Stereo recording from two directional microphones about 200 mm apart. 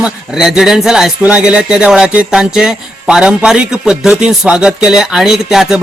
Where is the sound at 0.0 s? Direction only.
5° right (ahead or behind).